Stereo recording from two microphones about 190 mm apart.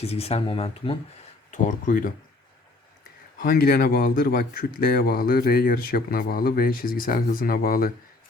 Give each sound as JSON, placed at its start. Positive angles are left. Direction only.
{"t": 0.0, "sound": "speech", "side_deg": 30}
{"t": 1.5, "sound": "speech", "side_deg": 40}
{"t": 3.4, "sound": "speech", "side_deg": 50}